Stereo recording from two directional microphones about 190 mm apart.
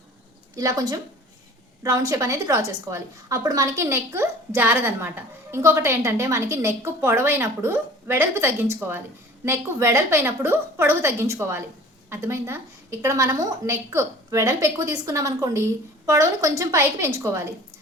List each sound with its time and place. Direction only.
0.5 s a woman's voice: 20° right (ahead or behind)